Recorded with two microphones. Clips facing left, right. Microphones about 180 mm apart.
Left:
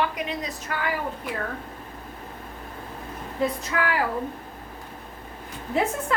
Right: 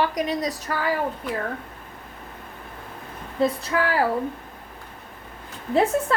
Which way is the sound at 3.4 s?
35° right (ahead or behind).